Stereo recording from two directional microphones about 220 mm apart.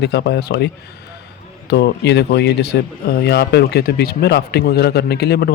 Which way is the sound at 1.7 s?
50° left (ahead or behind).